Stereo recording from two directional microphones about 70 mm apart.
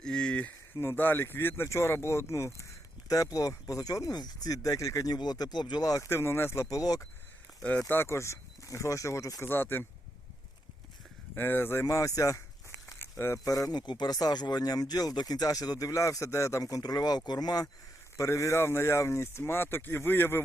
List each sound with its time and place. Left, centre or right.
0.0 s a sound: centre
0.8 s speech: left
3.1 s speech: left
5.1 s speech: left
6.1 s speech: left
6.7 s speech: left
7.6 s speech: centre
7.9 s speech: left
9.4 s speech: left
11.3 s speech: left
13.0 s a sound: left
13.4 s speech: left
18.2 s speech: left